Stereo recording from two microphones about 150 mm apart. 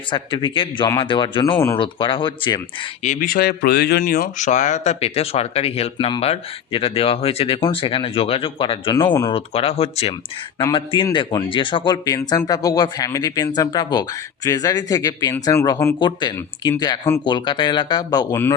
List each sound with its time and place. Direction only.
0.1 s speech: 30° left (ahead or behind)
3.0 s speech: 65° left (ahead or behind); by 9.0 s 35° left (ahead or behind)
9.0 s speech: 20° left (ahead or behind)
9.3 s speech: 40° left (ahead or behind)